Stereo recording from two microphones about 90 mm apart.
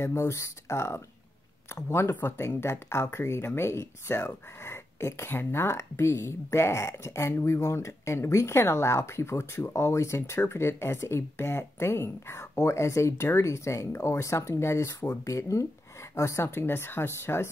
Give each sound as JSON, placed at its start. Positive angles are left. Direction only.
{"t": 0.0, "sound": "speech", "side_deg": 30}